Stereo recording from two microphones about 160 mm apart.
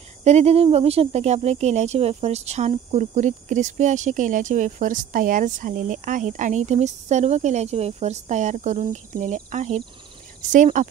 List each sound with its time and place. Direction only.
0.2 s speech: 45° right (ahead or behind)